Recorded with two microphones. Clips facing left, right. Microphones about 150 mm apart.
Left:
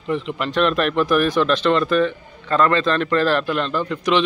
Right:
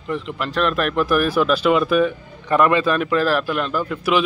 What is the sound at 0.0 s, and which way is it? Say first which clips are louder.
Speech: left 2 dB; centre (ahead or behind).